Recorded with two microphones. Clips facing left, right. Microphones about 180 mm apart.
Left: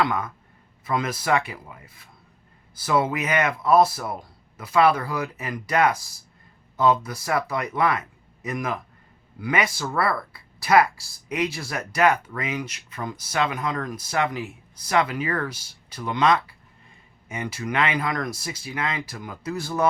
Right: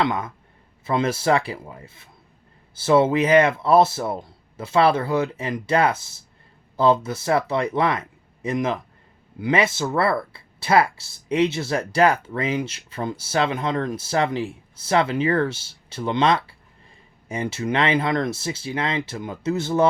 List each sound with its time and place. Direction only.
0.0 s speech: 25° right (ahead or behind)